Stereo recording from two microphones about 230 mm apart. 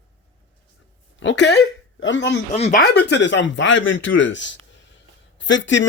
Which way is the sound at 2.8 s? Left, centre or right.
Left.